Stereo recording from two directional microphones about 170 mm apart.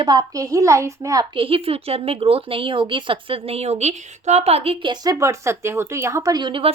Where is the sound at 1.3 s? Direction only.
35° right (ahead or behind).